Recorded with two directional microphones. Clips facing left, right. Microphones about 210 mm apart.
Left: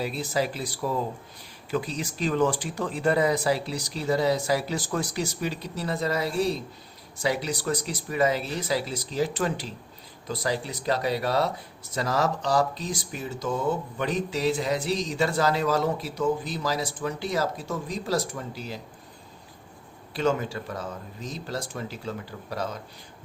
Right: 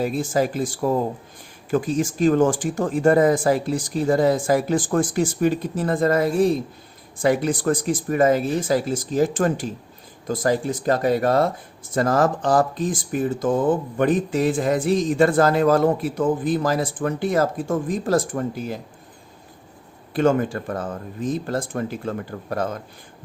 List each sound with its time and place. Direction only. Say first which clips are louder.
0.0 s speech: right 6 dB; 50° right (ahead or behind)
20.1 s speech: right 7 dB; 50° right (ahead or behind)